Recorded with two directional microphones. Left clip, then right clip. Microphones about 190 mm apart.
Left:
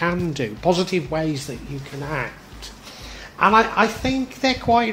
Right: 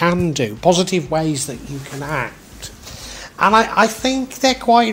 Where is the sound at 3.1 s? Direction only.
35° right (ahead or behind).